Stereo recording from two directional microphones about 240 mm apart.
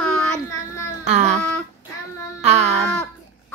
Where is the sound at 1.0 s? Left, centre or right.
Right.